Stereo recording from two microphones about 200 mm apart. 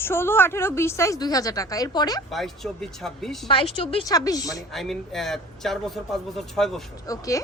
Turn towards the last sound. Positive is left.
turn(degrees=15)  # may be behind; listen again after turning